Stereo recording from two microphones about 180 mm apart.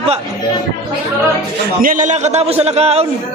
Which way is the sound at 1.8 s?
45° right (ahead or behind).